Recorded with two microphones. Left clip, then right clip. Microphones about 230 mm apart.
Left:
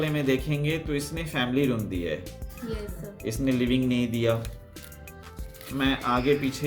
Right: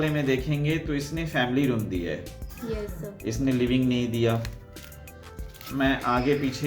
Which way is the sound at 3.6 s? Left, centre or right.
Left.